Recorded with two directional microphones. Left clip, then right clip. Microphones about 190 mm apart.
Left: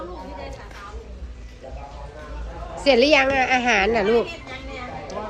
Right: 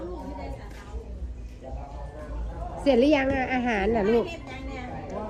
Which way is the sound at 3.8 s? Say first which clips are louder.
Left 5 dB; 50° right (ahead or behind).